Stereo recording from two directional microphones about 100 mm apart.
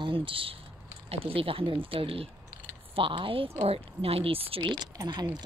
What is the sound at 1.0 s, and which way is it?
Speech, 75° right (ahead or behind).